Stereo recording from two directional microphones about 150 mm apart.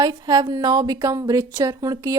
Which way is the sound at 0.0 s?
25° right (ahead or behind).